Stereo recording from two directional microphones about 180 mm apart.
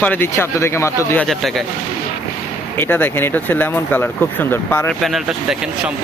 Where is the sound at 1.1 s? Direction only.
5° left (ahead or behind).